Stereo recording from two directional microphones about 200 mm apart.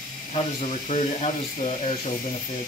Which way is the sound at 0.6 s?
35° left (ahead or behind).